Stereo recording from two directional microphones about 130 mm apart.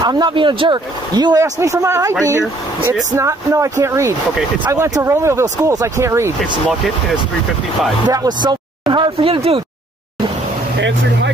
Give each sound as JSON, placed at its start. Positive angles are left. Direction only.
{"t": 0.0, "sound": "speech", "side_deg": -35}
{"t": 8.1, "sound": "speech", "side_deg": -30}